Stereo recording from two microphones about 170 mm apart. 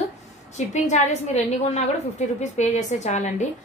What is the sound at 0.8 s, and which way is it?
A woman's voice, 40° left (ahead or behind).